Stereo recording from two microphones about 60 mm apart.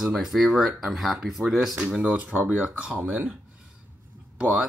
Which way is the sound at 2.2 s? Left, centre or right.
Centre.